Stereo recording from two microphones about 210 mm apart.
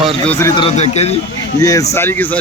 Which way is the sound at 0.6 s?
30° left (ahead or behind).